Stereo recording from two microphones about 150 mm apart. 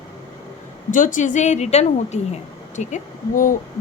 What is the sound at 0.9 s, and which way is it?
A woman's voice, 60° left (ahead or behind).